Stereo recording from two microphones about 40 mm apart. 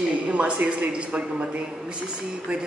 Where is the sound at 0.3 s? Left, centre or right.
Right.